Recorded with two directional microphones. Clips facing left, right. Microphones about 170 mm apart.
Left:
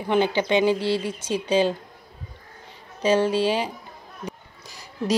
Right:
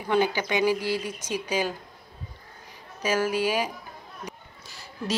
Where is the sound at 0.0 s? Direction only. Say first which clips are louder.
Left 3 dB; 25° left (ahead or behind).